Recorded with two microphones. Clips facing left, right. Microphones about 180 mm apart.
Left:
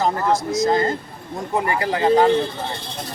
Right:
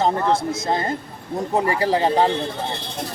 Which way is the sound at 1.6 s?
30° right (ahead or behind).